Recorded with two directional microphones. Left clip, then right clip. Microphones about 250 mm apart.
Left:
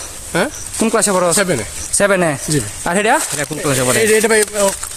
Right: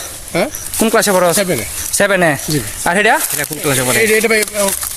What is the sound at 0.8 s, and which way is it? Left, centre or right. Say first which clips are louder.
Speech: right 3 dB; centre.